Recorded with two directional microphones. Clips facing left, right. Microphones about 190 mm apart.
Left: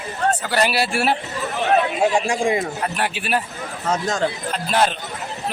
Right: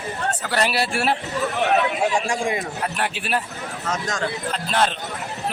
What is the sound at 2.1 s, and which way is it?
Speech, 25° left (ahead or behind).